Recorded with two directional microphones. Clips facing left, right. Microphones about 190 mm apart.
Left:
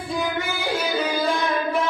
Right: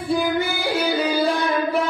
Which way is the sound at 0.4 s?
35° right (ahead or behind).